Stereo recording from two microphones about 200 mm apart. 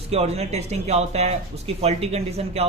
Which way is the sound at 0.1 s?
30° right (ahead or behind).